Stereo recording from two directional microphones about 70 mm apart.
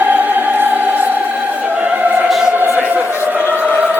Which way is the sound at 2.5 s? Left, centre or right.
Right.